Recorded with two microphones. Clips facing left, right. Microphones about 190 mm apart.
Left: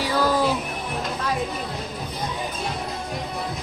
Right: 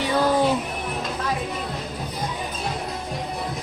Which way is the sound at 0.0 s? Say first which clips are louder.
Right 1 dB; 25° right (ahead or behind).